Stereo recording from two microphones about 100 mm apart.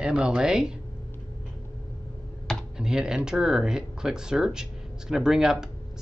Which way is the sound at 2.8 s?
5° right (ahead or behind).